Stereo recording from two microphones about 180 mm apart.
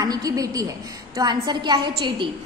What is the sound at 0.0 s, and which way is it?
A woman's voice, 20° right (ahead or behind).